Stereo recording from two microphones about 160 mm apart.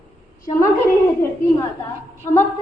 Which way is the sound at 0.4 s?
20° left (ahead or behind).